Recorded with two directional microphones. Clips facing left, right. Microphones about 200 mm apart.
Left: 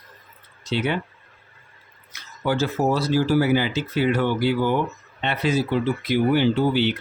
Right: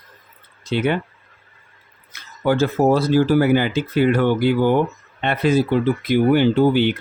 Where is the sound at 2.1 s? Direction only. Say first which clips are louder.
Right 5 dB; 55° right (ahead or behind).